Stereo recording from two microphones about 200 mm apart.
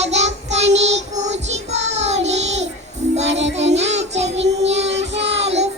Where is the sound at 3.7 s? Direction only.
35° right (ahead or behind).